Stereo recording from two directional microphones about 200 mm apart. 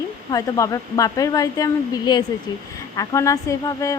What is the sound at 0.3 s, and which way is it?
A woman's voice, 15° left (ahead or behind).